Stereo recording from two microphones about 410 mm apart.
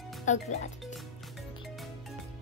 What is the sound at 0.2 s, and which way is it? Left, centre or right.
Speech, centre.